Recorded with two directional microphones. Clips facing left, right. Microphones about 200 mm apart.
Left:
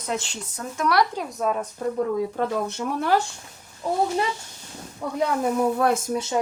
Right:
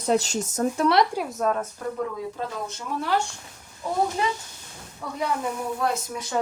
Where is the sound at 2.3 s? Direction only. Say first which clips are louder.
Left 7 dB; 60° left (ahead or behind).